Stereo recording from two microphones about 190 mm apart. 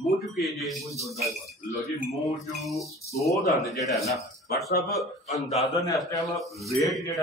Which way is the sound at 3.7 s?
Centre (ahead or behind).